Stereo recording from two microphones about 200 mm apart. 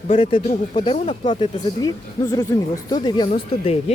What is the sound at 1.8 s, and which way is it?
Speech, 20° left (ahead or behind).